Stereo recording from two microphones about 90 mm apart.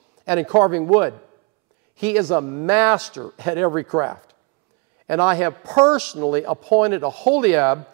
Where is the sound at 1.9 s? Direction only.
15° right (ahead or behind).